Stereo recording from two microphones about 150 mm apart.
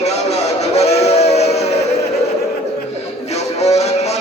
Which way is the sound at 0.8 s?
45° left (ahead or behind).